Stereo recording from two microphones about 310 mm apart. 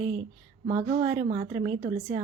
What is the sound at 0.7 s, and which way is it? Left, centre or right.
Speech, centre.